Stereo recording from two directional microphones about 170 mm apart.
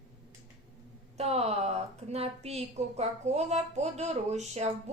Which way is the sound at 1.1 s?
40° right (ahead or behind).